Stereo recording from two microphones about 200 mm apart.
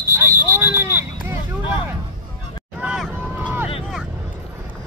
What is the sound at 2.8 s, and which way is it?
Vehicle, 5° right (ahead or behind).